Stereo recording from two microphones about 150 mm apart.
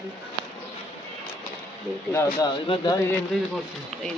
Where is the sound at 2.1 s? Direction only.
20° left (ahead or behind).